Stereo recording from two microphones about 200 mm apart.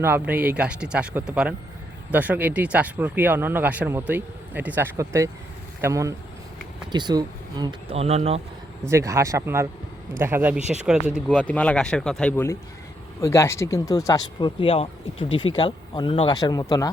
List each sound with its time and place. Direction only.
0.0 s speech: 10° right (ahead or behind); by 8.4 s 30° right (ahead or behind)
8.9 s speech: 15° right (ahead or behind)
10.6 s speech: 35° right (ahead or behind)
10.8 s speech: 5° right (ahead or behind)
11.3 s speech: 5° left (ahead or behind)